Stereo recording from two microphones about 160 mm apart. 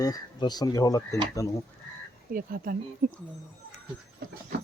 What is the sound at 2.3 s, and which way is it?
Speech, 65° right (ahead or behind).